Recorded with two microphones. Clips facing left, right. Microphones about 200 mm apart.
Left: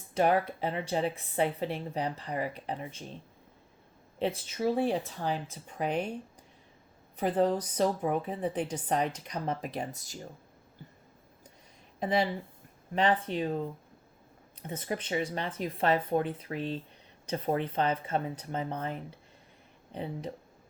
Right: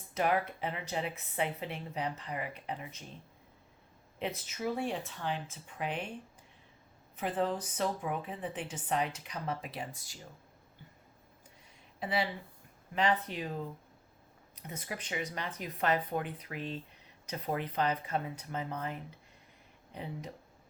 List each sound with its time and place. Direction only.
0.1 s speech: 30° left (ahead or behind)
4.2 s speech: 30° left (ahead or behind)
7.2 s speech: 35° left (ahead or behind)
11.9 s speech: 45° left (ahead or behind)
14.6 s speech: 30° left (ahead or behind)